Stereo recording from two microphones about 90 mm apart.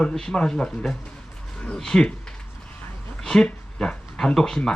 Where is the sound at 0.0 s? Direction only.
10° left (ahead or behind).